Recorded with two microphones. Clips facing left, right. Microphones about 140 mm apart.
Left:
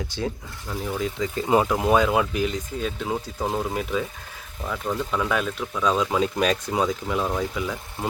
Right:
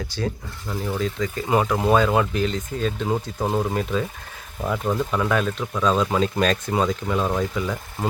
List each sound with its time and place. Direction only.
0.1 s speech: 20° left (ahead or behind); by 5.3 s 5° right (ahead or behind)
5.3 s speech: 5° left (ahead or behind)